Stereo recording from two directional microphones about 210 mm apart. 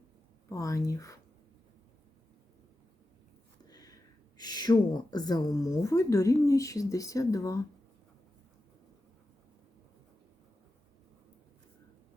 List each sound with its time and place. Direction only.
0.5 s speech: 15° left (ahead or behind)
3.6 s a sound: 20° left (ahead or behind)
4.4 s speech: 20° left (ahead or behind)